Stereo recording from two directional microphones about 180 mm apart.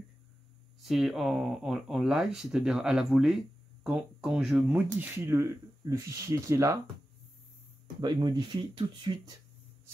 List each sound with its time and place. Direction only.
0.8 s speech: centre (ahead or behind)
8.0 s speech: 25° right (ahead or behind)